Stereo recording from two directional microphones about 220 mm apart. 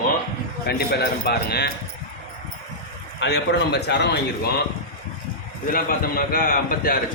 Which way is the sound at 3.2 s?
50° left (ahead or behind).